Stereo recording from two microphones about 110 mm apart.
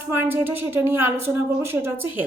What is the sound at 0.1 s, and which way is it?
A woman's voice, 20° right (ahead or behind).